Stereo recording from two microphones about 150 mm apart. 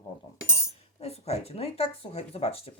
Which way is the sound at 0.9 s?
45° left (ahead or behind).